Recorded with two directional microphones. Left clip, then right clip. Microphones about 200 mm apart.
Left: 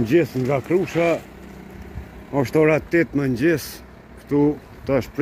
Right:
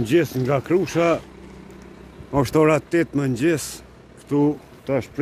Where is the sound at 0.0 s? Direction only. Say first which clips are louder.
Left 1 dB; 10° right (ahead or behind).